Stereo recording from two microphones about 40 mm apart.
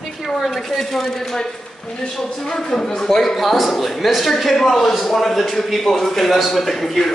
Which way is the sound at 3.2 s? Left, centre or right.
Centre.